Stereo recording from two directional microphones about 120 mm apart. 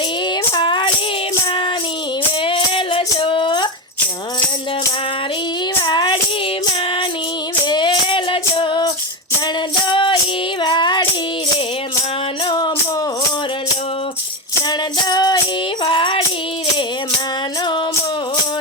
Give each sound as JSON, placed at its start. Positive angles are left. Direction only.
{"t": 0.5, "sound": "a sound", "side_deg": 40}
{"t": 2.4, "sound": "music", "side_deg": 45}
{"t": 5.8, "sound": "child singing", "side_deg": 40}
{"t": 7.6, "sound": "music", "side_deg": 40}
{"t": 12.5, "sound": "music", "side_deg": 40}
{"t": 14.7, "sound": "music", "side_deg": 35}